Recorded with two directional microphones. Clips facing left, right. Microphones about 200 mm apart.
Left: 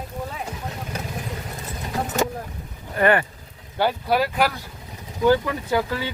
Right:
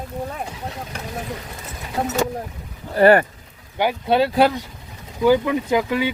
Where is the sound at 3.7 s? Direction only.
20° right (ahead or behind).